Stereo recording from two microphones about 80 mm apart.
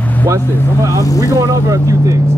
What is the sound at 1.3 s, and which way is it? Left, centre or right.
A man's voice, right.